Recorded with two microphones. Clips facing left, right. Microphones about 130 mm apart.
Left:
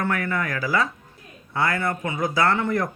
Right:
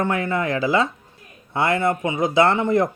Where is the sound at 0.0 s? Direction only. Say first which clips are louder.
Right 3 dB; 25° right (ahead or behind).